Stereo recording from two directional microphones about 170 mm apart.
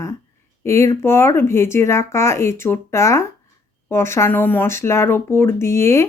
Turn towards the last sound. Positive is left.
turn(degrees=15)  # may be behind; listen again after turning